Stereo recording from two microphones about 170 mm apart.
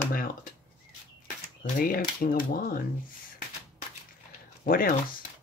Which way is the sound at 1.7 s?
55° left (ahead or behind).